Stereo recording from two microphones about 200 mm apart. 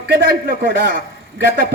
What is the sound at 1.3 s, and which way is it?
Speech, 50° right (ahead or behind).